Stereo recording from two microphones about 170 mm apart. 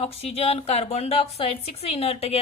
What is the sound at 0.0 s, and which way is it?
Speech, 35° left (ahead or behind).